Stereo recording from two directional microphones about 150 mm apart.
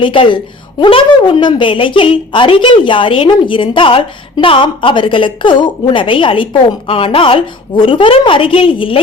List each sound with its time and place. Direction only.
0.0 s a woman's voice: 35° left (ahead or behind)